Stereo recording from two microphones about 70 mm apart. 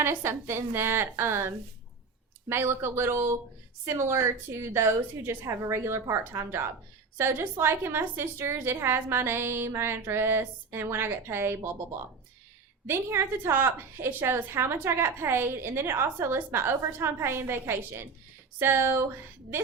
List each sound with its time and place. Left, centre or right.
0.0 s a woman's voice: right